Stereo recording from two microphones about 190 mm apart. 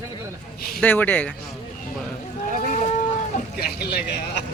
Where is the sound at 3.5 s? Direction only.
60° left (ahead or behind).